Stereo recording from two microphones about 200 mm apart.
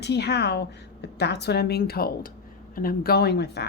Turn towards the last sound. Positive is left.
turn(degrees=55)  # may be behind; listen again after turning